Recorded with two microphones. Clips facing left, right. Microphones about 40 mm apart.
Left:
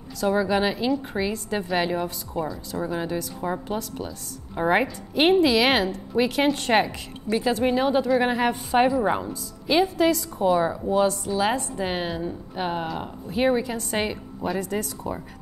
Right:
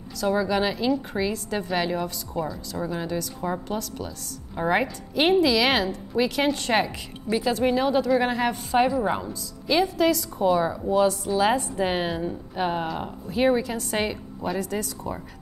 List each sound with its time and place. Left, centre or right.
0.2 s a woman's voice: centre
11.1 s a woman's voice: centre